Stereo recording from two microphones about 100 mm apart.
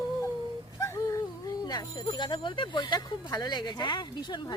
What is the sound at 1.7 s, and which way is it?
Speech, 45° left (ahead or behind).